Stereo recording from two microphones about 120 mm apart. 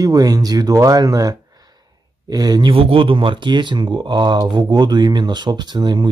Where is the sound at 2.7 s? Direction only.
50° right (ahead or behind).